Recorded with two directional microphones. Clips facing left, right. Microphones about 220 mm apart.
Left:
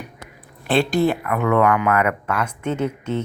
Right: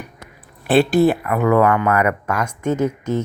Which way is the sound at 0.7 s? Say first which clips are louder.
Right 4 dB; 10° right (ahead or behind).